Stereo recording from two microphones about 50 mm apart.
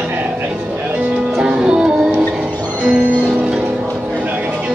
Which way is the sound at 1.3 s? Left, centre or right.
Centre.